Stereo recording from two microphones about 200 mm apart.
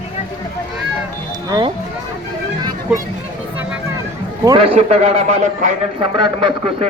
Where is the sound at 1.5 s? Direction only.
20° right (ahead or behind).